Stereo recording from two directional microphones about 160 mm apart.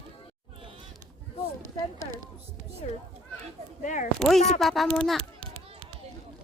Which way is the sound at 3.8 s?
50° left (ahead or behind).